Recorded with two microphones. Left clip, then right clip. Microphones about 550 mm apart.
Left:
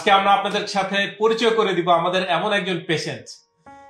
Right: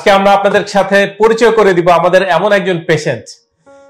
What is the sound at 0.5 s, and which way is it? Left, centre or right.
Speech, right.